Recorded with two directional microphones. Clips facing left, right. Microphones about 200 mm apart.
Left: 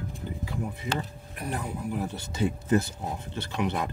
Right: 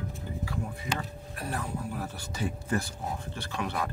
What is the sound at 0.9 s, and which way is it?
Speech, 15° left (ahead or behind).